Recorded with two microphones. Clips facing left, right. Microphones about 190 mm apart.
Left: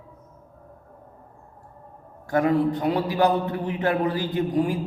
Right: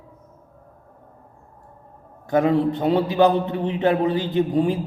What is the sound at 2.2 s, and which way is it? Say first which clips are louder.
A man's voice: right 2 dB; 20° right (ahead or behind).